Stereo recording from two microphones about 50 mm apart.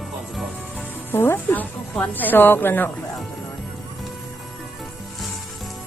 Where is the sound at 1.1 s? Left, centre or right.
Left.